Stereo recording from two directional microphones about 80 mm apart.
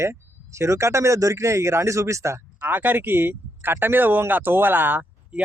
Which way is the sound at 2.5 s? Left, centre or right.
Right.